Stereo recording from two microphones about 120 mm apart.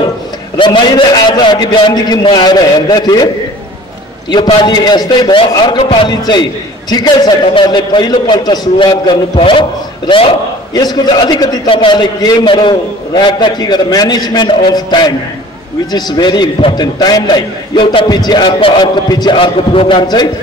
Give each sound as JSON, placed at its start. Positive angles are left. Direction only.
{"t": 0.6, "sound": "a man's voice", "side_deg": 40}
{"t": 4.6, "sound": "a man's voice", "side_deg": 35}
{"t": 10.7, "sound": "a man's voice", "side_deg": 35}